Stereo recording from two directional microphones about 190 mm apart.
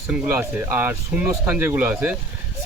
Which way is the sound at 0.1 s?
10° right (ahead or behind).